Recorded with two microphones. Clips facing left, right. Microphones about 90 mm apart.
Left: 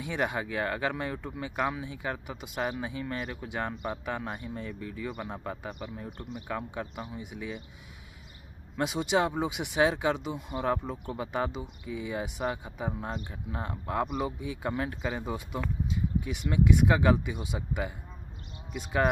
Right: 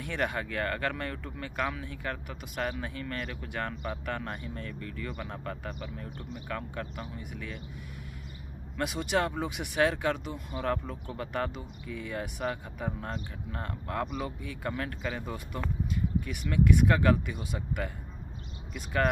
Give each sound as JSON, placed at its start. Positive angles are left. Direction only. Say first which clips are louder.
{"t": 0.0, "sound": "speech", "louder": "left 1 dB", "side_deg": 15}
{"t": 8.7, "sound": "speech", "louder": "left 2 dB", "side_deg": 20}